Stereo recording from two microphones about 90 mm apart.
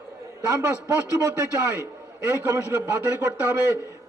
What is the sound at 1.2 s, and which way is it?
Speech, 30° right (ahead or behind).